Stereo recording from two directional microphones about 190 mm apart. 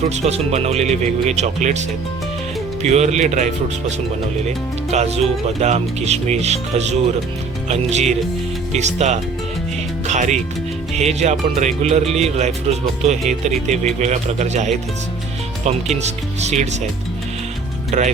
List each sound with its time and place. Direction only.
0.0 s speech: 35° right (ahead or behind)
2.8 s speech: 35° right (ahead or behind)
10.1 s music: 40° right (ahead or behind)
10.9 s speech: 35° right (ahead or behind)
16.4 s speech: 35° right (ahead or behind)
17.9 s speech: 40° right (ahead or behind)